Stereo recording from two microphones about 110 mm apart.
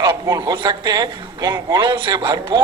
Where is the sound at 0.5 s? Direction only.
45° right (ahead or behind).